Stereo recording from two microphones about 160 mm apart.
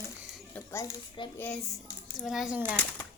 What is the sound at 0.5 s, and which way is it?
Speech, 20° left (ahead or behind).